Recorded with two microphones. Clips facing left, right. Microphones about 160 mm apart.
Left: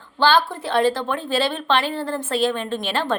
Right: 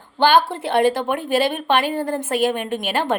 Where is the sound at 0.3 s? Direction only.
25° right (ahead or behind).